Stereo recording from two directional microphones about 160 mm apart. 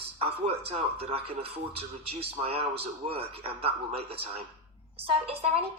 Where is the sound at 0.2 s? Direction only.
40° right (ahead or behind).